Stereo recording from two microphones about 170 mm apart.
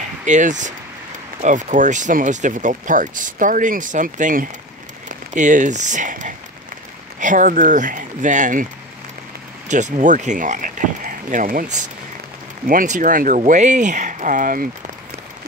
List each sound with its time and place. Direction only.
0.2 s speech: 45° right (ahead or behind)
9.7 s speech: 45° right (ahead or behind)
12.6 s speech: 50° right (ahead or behind)